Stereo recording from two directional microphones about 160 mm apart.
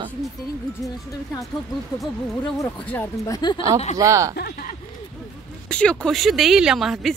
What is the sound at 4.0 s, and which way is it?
Speech, 20° right (ahead or behind).